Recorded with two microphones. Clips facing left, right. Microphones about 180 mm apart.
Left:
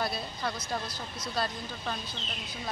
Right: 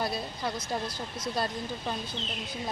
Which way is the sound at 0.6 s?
50° right (ahead or behind).